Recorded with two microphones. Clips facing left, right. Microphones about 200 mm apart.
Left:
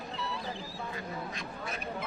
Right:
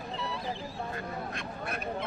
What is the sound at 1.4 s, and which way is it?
Speech, 60° right (ahead or behind).